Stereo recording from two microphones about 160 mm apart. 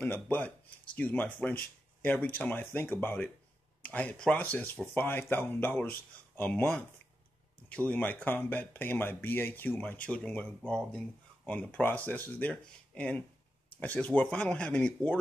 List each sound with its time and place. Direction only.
0.0 s speech: 10° left (ahead or behind)